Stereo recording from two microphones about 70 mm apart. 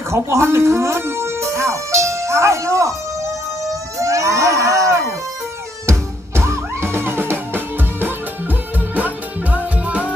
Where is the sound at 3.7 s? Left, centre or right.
Right.